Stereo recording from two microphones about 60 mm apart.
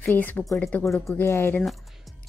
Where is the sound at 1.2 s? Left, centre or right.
Left.